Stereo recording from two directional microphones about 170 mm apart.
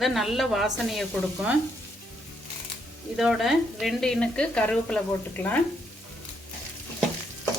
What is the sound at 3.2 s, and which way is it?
Speech, centre (ahead or behind).